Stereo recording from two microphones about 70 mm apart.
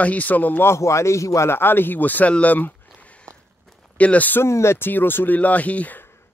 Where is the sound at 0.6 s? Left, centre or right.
Left.